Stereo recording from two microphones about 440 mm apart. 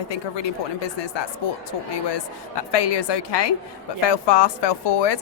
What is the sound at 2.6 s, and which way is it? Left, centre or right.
A woman's voice, left.